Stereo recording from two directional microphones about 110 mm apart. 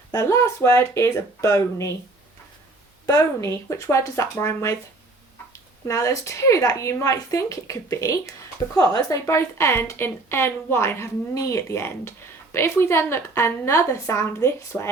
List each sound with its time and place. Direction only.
0.1 s a woman's voice: 30° left (ahead or behind)
3.1 s a woman's voice: 30° left (ahead or behind)
5.8 s a woman's voice: 30° left (ahead or behind)